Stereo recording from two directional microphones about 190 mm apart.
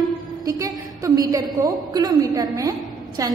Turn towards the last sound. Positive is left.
turn(degrees=-20)  # may be behind; listen again after turning